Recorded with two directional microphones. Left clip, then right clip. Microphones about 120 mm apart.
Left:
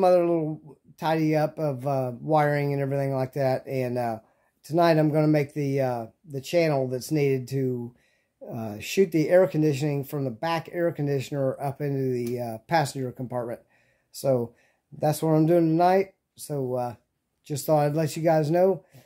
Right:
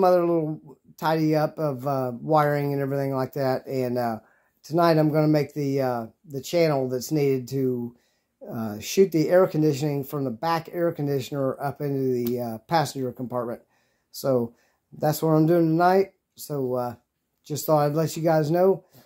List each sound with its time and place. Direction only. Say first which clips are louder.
0.0 s speech: right 1 dB; 15° left (ahead or behind)